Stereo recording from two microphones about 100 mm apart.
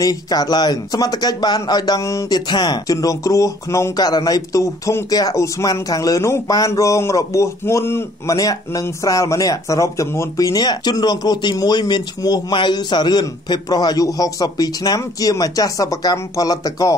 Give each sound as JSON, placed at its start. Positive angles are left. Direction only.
{"t": 0.0, "sound": "speech", "side_deg": 40}